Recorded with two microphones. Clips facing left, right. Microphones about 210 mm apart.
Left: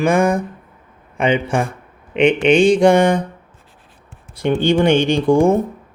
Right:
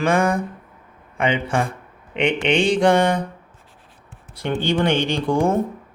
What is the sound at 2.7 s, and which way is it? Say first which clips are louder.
Speech: left 5 dB; 10° left (ahead or behind).